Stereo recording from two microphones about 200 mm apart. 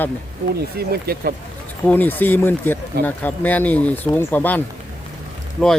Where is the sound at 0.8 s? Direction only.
50° right (ahead or behind).